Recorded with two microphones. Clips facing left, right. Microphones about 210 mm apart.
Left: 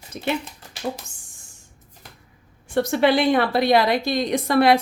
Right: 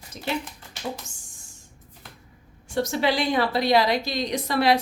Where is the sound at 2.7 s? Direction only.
60° left (ahead or behind).